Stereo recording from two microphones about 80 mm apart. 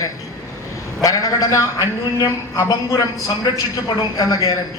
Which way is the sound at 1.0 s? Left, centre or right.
Left.